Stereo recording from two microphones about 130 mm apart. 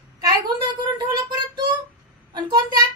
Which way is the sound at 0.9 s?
35° right (ahead or behind).